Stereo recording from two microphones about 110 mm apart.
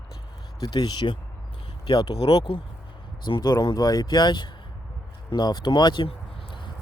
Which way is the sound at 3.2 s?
40° left (ahead or behind).